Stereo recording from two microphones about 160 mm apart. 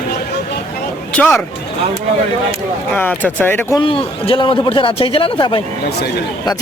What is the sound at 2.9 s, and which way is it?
Speech, 10° left (ahead or behind).